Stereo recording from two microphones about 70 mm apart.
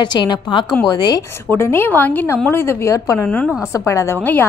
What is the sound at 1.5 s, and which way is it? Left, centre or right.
A woman's voice, left.